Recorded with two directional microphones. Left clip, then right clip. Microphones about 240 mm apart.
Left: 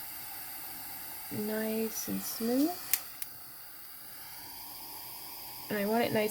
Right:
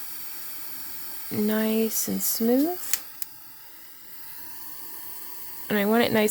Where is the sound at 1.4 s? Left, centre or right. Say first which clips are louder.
Right 8 dB; right.